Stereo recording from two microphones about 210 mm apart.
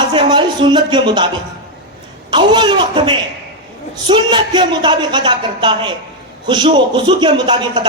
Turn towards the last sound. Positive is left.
turn(degrees=-20)  # may be behind; listen again after turning